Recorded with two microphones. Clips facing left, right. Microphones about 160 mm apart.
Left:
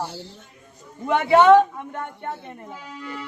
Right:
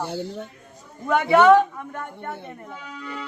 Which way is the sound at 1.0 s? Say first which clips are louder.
Left 1 dB; 25° left (ahead or behind).